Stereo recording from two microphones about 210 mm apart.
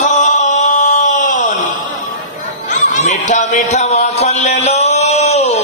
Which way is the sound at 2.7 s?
35° left (ahead or behind).